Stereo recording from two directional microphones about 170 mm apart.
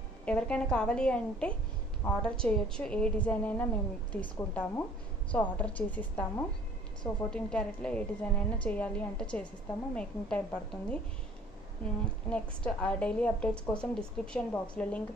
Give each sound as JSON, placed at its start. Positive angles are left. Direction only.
{"t": 0.2, "sound": "a woman's voice", "side_deg": 5}
{"t": 12.0, "sound": "a woman's voice", "side_deg": 5}